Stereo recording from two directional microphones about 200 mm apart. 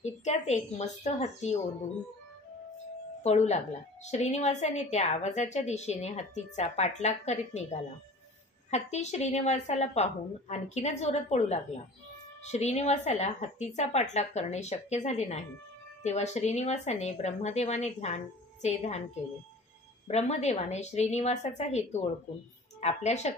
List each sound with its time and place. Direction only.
0.0 s a woman's voice: 35° left (ahead or behind)
3.2 s a woman's voice: 35° left (ahead or behind)
20.1 s a woman's voice: 35° left (ahead or behind)